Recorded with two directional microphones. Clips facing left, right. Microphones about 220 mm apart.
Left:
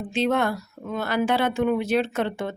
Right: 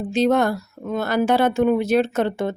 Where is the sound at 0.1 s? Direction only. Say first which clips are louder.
Right 5 dB; 40° right (ahead or behind).